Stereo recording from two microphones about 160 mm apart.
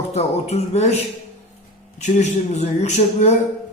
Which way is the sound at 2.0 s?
45° left (ahead or behind).